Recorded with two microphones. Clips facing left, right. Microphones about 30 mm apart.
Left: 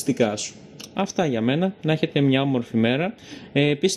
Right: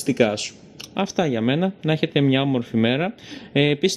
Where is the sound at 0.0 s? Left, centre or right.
Right.